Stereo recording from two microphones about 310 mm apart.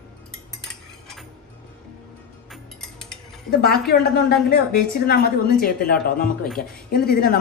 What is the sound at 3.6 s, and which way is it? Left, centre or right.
Speech, left.